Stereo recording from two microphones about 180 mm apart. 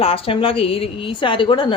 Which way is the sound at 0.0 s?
30° left (ahead or behind).